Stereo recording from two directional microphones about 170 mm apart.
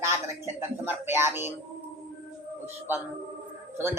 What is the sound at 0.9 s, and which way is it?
Music, 15° right (ahead or behind).